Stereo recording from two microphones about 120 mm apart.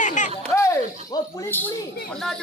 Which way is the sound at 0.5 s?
25° left (ahead or behind).